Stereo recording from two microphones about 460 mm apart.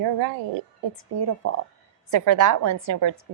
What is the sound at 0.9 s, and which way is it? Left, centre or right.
Speech, right.